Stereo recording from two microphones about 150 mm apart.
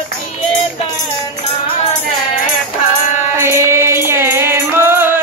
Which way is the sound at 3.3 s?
15° right (ahead or behind).